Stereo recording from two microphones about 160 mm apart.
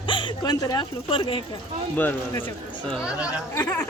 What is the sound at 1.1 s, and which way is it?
Speech, 35° left (ahead or behind).